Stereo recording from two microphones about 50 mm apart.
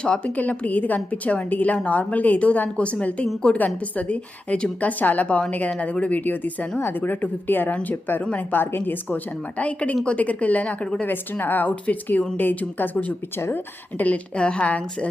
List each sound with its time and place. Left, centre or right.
0.0 s a woman's voice: left
3.5 s a woman's voice: centre
3.9 s a woman's voice: left
7.7 s a woman's voice: left
9.0 s a woman's voice: left
11.0 s speech: left
14.3 s a woman's voice: centre